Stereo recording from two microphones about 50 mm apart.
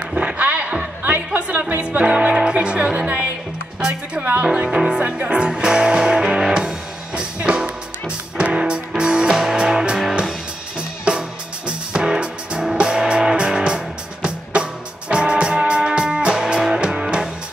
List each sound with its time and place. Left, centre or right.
0.1 s music: right
1.8 s speech: right
4.2 s speech: right
4.6 s speech: centre
6.4 s music: centre